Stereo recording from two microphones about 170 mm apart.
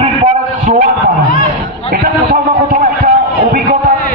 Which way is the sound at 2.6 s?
55° right (ahead or behind).